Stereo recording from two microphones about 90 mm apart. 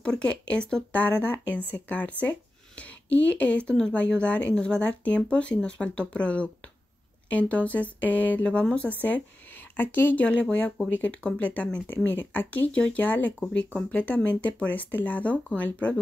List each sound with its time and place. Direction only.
0.0 s speech: 10° left (ahead or behind)